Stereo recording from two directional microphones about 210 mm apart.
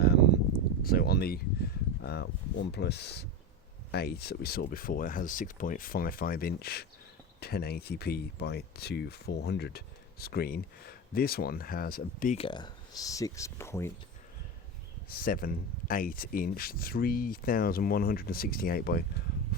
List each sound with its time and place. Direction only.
0.0 s a sound: 50° left (ahead or behind)
0.8 s speech: 45° left (ahead or behind)
12.4 s speech: 20° left (ahead or behind)
15.1 s speech: 45° left (ahead or behind)